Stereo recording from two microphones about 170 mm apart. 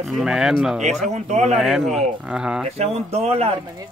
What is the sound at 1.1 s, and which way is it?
Speech, 40° right (ahead or behind).